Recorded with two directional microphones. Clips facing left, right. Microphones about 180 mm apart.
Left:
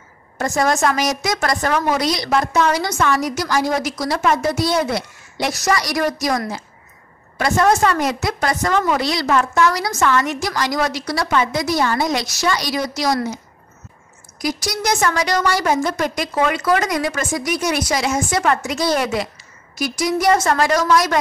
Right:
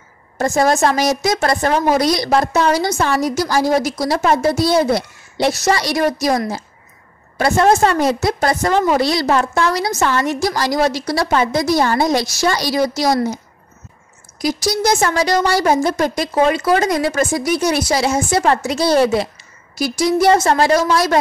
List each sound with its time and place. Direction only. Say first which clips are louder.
0.4 s a woman's voice: right 3 dB; 30° right (ahead or behind)
14.4 s a woman's voice: right 5 dB; 30° right (ahead or behind)